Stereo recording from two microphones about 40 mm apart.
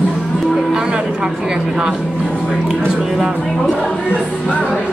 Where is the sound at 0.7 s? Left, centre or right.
Right.